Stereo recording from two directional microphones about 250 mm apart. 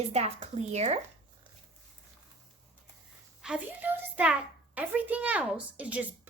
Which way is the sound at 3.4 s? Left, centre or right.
Centre.